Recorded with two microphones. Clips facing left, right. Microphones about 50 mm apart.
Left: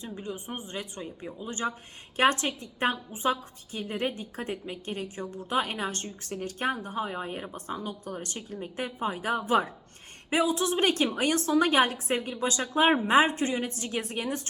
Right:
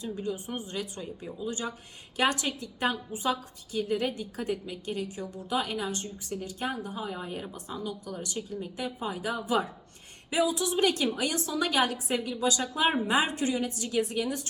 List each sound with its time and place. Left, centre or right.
0.0 s a woman's voice: left